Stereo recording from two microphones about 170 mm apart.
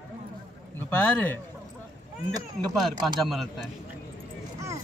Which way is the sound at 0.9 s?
10° left (ahead or behind).